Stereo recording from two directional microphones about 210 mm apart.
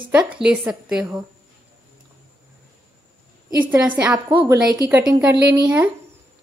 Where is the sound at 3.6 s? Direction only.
10° right (ahead or behind).